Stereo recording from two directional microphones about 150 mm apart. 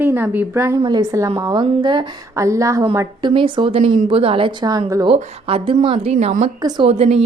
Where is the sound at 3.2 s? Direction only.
35° right (ahead or behind); by 4.1 s 50° right (ahead or behind).